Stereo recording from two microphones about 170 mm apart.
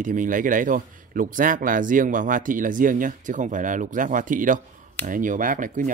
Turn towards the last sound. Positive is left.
turn(degrees=-50)  # may be behind; listen again after turning